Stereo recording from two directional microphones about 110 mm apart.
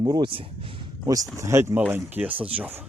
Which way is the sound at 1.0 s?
30° right (ahead or behind).